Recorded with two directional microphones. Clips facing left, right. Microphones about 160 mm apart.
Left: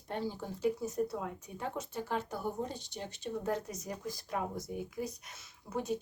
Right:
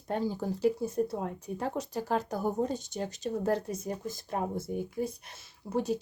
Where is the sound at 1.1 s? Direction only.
40° right (ahead or behind); by 4.2 s 25° right (ahead or behind).